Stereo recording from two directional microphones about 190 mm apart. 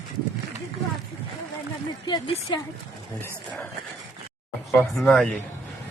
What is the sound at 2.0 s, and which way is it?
Speech, 25° left (ahead or behind).